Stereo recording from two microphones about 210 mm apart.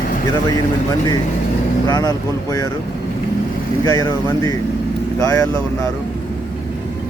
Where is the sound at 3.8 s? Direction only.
15° left (ahead or behind).